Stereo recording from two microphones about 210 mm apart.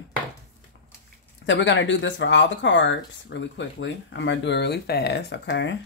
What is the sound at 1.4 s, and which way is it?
Speech, 60° left (ahead or behind).